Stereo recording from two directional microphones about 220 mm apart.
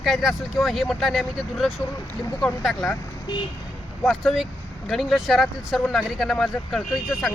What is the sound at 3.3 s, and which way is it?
Speech, 20° left (ahead or behind).